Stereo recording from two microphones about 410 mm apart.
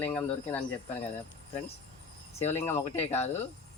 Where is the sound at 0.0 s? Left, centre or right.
Centre.